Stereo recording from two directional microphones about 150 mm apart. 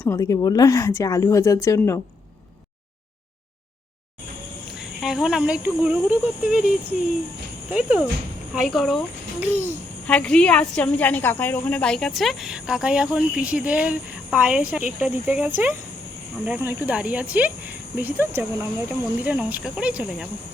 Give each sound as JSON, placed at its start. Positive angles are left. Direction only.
{"t": 0.0, "sound": "a woman's voice", "side_deg": 20}
{"t": 4.7, "sound": "speech", "side_deg": 0}
{"t": 7.7, "sound": "a woman's voice", "side_deg": -5}
{"t": 9.4, "sound": "speech", "side_deg": -15}
{"t": 10.1, "sound": "a woman's voice", "side_deg": 5}